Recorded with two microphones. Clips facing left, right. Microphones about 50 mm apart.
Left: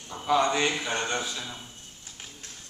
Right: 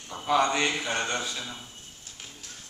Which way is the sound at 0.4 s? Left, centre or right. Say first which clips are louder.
Right 1 dB; centre.